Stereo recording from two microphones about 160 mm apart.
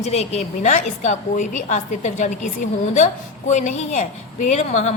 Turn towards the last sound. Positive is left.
turn(degrees=45)  # may be behind; listen again after turning